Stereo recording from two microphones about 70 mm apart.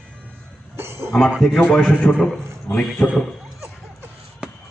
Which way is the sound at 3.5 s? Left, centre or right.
Right.